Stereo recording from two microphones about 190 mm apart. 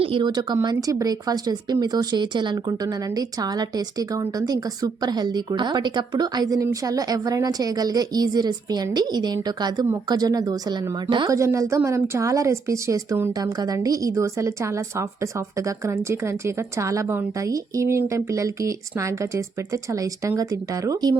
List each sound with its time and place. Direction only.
0.0 s speech: 25° right (ahead or behind)